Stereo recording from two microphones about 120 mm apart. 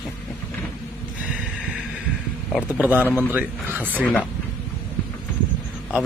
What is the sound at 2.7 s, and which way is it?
A man's voice, 15° right (ahead or behind).